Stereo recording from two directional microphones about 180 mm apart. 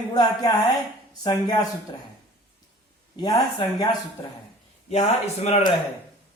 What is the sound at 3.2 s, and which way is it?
Speech, 20° left (ahead or behind).